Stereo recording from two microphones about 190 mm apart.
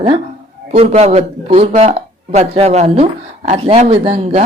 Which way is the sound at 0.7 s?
35° right (ahead or behind).